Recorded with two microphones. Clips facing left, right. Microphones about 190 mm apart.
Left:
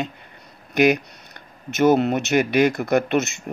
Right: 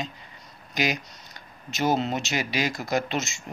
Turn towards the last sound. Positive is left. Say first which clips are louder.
# left 7 dB
turn(degrees=60)  # may be behind; listen again after turning